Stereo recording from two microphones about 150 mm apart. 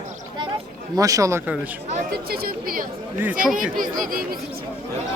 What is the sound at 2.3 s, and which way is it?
Speech, 85° right.